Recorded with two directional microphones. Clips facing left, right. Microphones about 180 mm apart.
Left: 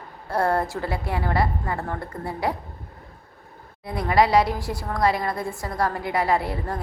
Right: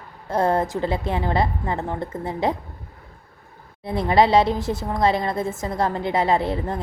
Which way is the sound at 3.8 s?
25° right (ahead or behind).